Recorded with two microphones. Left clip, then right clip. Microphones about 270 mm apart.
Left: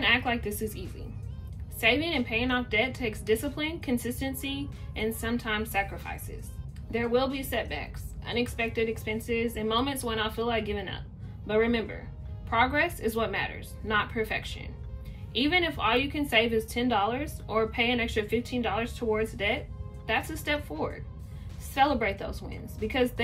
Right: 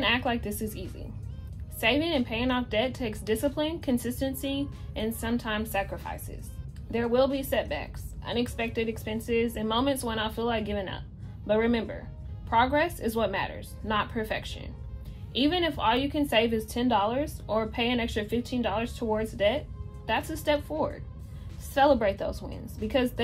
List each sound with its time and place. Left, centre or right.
0.0 s a woman's voice: centre
19.0 s a woman's voice: centre